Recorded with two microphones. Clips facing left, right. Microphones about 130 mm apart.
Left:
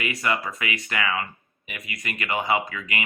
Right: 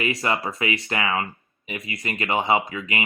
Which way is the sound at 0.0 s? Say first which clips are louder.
Right 2 dB; 30° right (ahead or behind).